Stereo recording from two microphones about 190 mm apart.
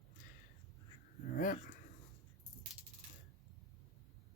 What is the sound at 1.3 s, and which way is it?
Speech, 45° left (ahead or behind).